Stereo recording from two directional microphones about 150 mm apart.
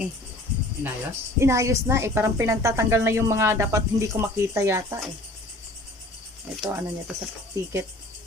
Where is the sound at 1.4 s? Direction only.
20° right (ahead or behind).